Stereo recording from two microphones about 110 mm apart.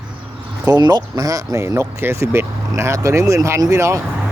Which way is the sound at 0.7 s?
40° right (ahead or behind).